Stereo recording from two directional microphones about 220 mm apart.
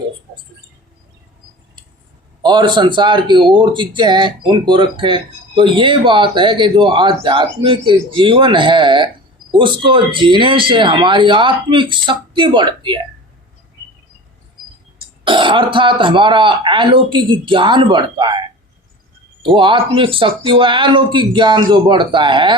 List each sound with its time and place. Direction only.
2.4 s a man's voice: 20° right (ahead or behind)
15.2 s a man's voice: 20° right (ahead or behind)